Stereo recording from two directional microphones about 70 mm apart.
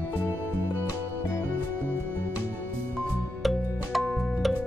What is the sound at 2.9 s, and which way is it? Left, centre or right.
Music, centre.